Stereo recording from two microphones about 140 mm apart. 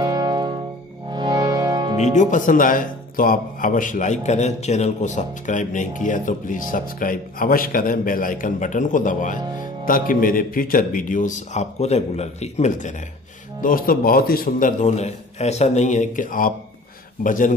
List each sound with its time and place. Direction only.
0.0 s music: 30° right (ahead or behind)
2.1 s speech: 70° left (ahead or behind)
9.8 s speech: 85° left; by 12.9 s 60° left (ahead or behind)
13.6 s speech: 85° left